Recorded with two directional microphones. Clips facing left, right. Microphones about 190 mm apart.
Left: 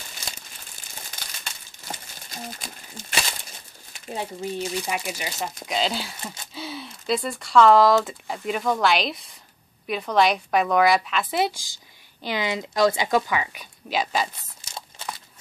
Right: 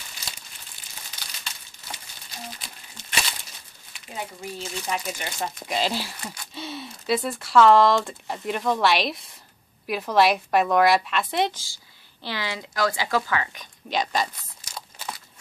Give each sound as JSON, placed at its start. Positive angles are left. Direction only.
{"t": 1.2, "sound": "crumpling", "side_deg": 50}
{"t": 3.9, "sound": "crumpling", "side_deg": 35}
{"t": 4.4, "sound": "a woman's voice", "side_deg": 15}
{"t": 6.2, "sound": "a sound", "side_deg": 25}
{"t": 6.5, "sound": "a woman's voice", "side_deg": 0}
{"t": 14.6, "sound": "crumpling", "side_deg": 25}